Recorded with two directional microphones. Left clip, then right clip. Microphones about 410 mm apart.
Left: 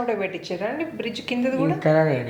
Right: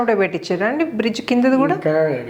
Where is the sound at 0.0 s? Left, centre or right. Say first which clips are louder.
Right 8 dB; right.